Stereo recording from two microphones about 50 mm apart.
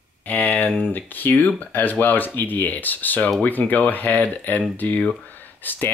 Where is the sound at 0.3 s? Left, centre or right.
Left.